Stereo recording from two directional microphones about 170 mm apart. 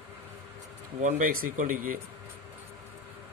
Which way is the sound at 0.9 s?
50° right (ahead or behind).